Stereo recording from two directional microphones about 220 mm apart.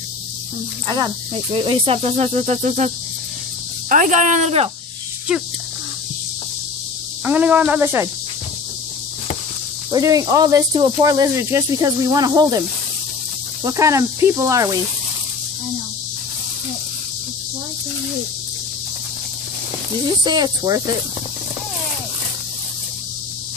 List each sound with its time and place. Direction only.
0.8 s speech: 20° right (ahead or behind)
3.9 s speech: 35° right (ahead or behind)
7.2 s speech: 5° right (ahead or behind)
9.8 s speech: 15° right (ahead or behind)
13.7 s speech: 15° right (ahead or behind)
20.2 s speech: 20° right (ahead or behind)